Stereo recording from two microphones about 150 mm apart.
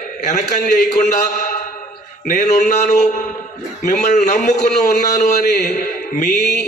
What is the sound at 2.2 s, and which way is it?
A man's voice, 55° left (ahead or behind).